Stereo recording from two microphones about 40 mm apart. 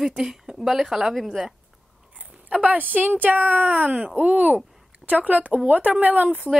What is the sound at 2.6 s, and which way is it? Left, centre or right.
Speech, right.